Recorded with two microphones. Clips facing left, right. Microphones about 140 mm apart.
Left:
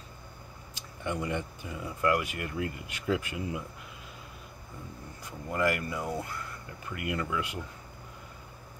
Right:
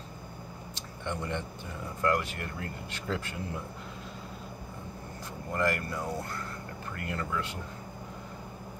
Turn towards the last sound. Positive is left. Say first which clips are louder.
# left 2 dB
turn(degrees=10)  # may be behind; listen again after turning